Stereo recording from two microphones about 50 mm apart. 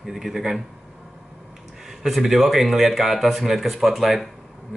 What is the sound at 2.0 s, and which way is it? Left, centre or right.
Speech, centre.